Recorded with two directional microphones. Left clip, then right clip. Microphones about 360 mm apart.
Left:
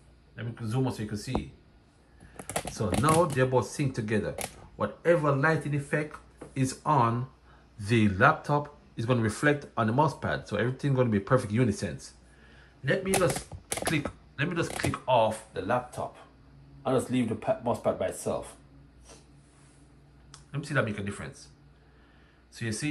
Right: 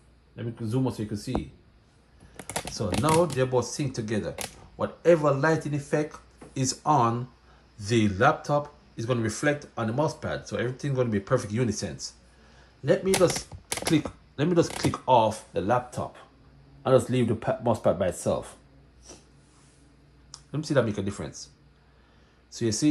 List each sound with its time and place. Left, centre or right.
0.4 s speech: centre
2.3 s typing: centre
2.7 s speech: centre
14.3 s speech: centre; by 18.5 s right
20.2 s speech: centre
22.5 s speech: centre